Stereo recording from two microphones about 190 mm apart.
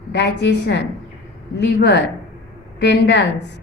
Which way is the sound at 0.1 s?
65° left (ahead or behind).